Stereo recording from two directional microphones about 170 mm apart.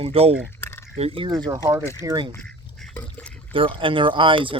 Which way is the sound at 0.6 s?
15° left (ahead or behind).